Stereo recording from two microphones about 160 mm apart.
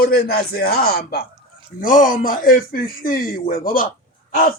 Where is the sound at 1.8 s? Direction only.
55° left (ahead or behind).